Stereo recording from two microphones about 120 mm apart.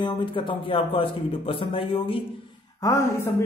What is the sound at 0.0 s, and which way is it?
Speech, 45° left (ahead or behind).